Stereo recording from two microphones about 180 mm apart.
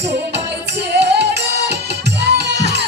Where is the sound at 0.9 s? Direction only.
70° right (ahead or behind).